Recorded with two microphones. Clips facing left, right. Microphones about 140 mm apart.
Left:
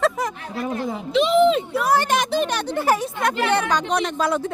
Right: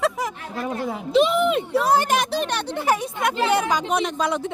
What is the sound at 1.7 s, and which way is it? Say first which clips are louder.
Speech: right 1 dB; 30° right (ahead or behind).